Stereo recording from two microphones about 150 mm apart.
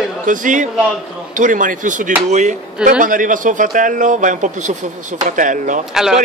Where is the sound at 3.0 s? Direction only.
60° right (ahead or behind).